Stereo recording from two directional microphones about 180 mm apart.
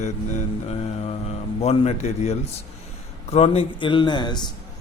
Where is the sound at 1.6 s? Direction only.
35° left (ahead or behind).